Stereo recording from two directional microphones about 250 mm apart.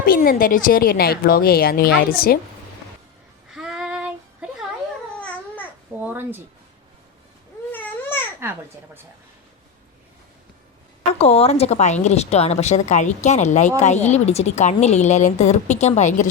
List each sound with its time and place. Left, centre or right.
0.0 s a woman's voice: left
3.5 s female singing: centre
6.0 s speech: centre
7.7 s babbling: centre
11.2 s a woman's voice: left